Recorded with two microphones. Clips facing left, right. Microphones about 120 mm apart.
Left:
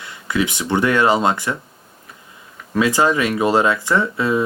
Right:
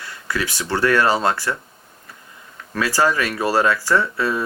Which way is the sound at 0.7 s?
20° left (ahead or behind).